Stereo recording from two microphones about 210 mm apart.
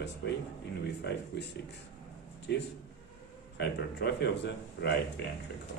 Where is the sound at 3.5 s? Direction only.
55° left (ahead or behind).